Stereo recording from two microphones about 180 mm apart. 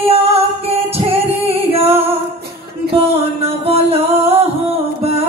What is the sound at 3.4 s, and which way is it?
Music, 35° right (ahead or behind).